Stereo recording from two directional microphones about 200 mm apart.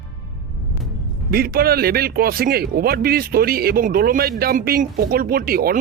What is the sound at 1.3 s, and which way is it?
Speech, 50° right (ahead or behind).